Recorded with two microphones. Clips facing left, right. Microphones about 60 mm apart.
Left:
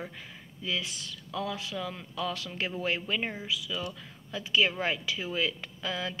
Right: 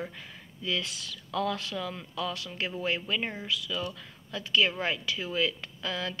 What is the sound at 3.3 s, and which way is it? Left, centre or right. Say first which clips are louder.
A woman's voice: right 1 dB; centre.